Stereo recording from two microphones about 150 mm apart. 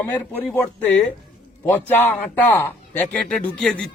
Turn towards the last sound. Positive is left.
turn(degrees=5)  # may be behind; listen again after turning